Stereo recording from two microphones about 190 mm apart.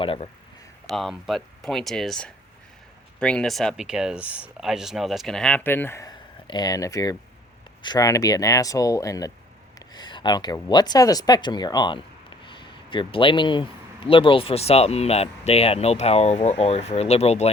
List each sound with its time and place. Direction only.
0.0 s speech: 30° left (ahead or behind)
0.9 s speech: centre (ahead or behind); by 17.5 s 35° left (ahead or behind)